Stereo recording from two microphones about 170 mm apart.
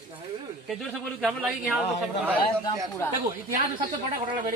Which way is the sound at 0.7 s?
Centre (ahead or behind).